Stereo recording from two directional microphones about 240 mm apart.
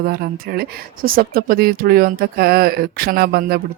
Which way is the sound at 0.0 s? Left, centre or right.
Right.